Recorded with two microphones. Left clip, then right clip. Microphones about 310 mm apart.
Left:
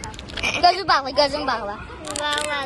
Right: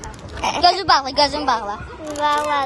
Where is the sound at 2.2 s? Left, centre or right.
Right.